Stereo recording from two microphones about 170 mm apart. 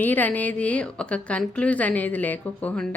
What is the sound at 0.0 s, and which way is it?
Speech, 10° left (ahead or behind).